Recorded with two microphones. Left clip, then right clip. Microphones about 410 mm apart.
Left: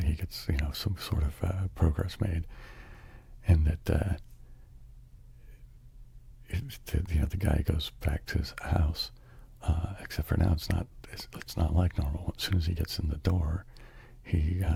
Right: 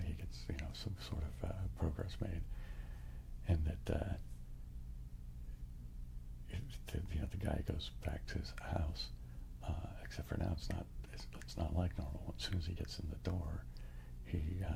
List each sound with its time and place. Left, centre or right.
0.0 s speech: left
6.5 s speech: left